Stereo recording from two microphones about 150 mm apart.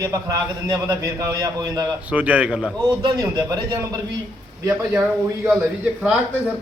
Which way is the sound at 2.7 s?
25° right (ahead or behind).